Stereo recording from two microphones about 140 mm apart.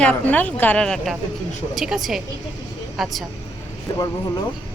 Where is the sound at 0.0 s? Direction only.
10° left (ahead or behind).